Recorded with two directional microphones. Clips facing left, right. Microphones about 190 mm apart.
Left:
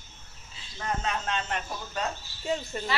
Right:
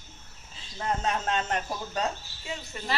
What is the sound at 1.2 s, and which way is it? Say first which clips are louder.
Speech: right 3 dB; 40° right (ahead or behind).